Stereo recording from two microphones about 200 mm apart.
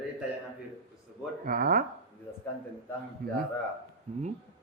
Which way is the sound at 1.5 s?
45° right (ahead or behind).